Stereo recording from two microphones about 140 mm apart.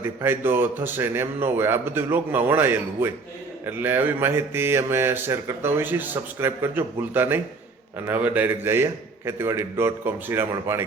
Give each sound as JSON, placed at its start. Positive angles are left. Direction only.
{"t": 0.0, "sound": "speech", "side_deg": -15}